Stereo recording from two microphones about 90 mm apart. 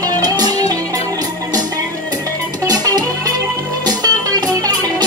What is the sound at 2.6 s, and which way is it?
Music, 45° right (ahead or behind).